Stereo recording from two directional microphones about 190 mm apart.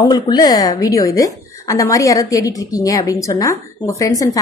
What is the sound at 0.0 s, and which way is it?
A woman's voice, 20° left (ahead or behind).